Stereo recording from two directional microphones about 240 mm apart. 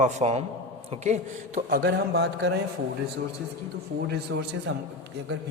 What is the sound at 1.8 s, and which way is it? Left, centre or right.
Speech, right.